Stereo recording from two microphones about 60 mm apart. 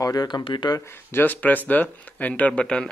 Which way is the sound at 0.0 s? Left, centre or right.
Left.